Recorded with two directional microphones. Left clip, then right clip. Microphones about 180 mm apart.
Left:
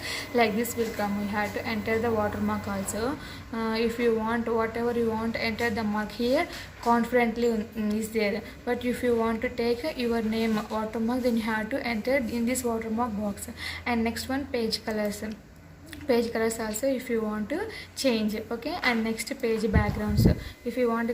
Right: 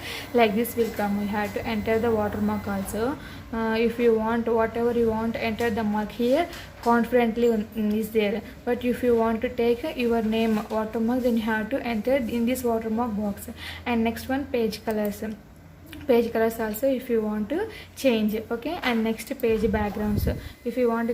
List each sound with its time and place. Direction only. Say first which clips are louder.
0.1 s a woman's voice: right 3 dB; 30° right (ahead or behind)